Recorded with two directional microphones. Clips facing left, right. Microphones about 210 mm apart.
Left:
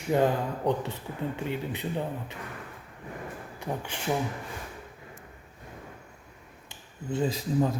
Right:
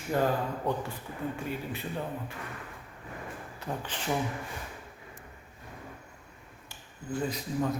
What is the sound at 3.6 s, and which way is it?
Speech, 15° left (ahead or behind).